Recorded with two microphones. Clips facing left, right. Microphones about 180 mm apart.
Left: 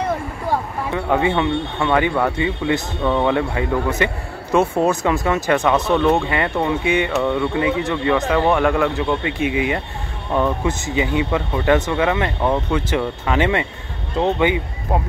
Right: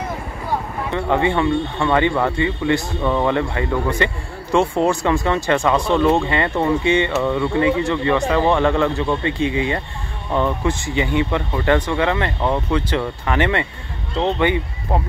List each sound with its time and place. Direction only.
0.9 s speech: 5° left (ahead or behind)
5.9 s speech: 10° right (ahead or behind)
6.1 s speech: 5° left (ahead or behind)
6.8 s speech: 15° left (ahead or behind)
7.1 s speech: centre (ahead or behind)